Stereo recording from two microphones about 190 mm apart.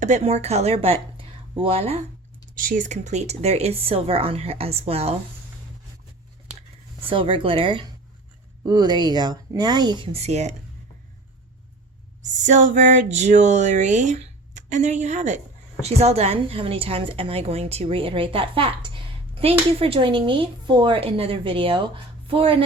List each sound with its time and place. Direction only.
0.0 s speech: 35° right (ahead or behind)
2.6 s speech: 45° right (ahead or behind)
7.1 s speech: 25° right (ahead or behind)
12.4 s speech: 40° right (ahead or behind)